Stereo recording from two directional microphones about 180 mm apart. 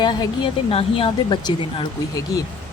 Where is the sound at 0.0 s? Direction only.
25° left (ahead or behind).